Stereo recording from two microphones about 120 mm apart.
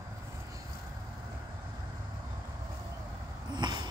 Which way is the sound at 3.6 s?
40° right (ahead or behind).